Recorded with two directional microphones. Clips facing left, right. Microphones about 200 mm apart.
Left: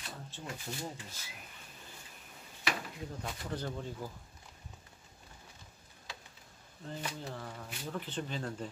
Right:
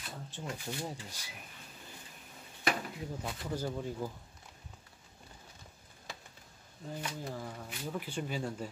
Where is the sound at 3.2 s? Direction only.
10° right (ahead or behind).